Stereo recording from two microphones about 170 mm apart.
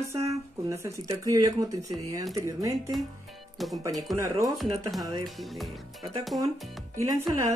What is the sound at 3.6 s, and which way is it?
Speech, centre (ahead or behind).